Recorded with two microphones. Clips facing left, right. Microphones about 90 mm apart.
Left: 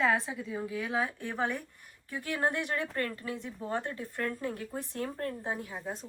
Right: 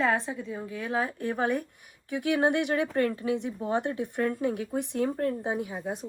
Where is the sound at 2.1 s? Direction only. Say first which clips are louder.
Right 9 dB; 75° right (ahead or behind).